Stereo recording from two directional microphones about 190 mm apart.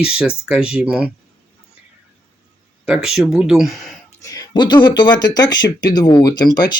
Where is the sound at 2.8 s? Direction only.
5° right (ahead or behind).